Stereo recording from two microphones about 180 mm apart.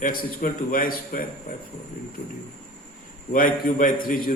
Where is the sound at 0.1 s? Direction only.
50° left (ahead or behind).